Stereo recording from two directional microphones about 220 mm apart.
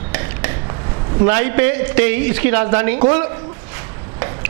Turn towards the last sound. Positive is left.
turn(degrees=-15)  # may be behind; listen again after turning